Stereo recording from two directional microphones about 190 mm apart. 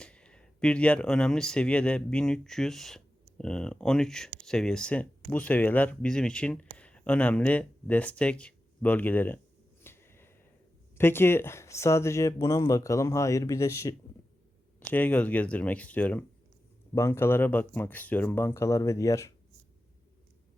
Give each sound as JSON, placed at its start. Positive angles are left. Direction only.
{"t": 0.0, "sound": "speech", "side_deg": 5}
{"t": 9.8, "sound": "a sound", "side_deg": 10}
{"t": 10.9, "sound": "speech", "side_deg": 10}
{"t": 14.9, "sound": "speech", "side_deg": 5}